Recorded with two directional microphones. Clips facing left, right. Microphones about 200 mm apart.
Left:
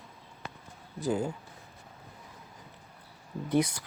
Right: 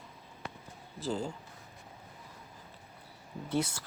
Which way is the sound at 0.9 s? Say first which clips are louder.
Left 5 dB; 15° left (ahead or behind).